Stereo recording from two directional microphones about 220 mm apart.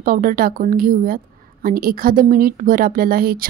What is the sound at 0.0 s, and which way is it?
A woman's voice, 40° right (ahead or behind).